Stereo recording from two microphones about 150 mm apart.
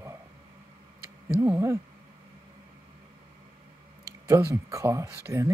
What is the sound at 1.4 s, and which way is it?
Speech, 15° right (ahead or behind).